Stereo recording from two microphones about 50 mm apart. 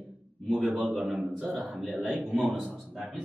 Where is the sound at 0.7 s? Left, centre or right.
Centre.